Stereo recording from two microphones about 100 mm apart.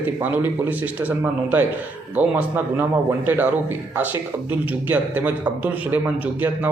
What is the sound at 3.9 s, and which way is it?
A man's voice, 20° right (ahead or behind).